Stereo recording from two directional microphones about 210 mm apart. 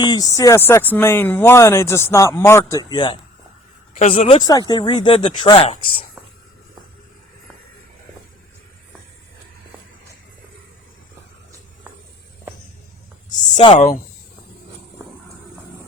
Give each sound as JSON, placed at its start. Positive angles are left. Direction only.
{"t": 0.0, "sound": "speech", "side_deg": 20}
{"t": 13.3, "sound": "speech", "side_deg": 25}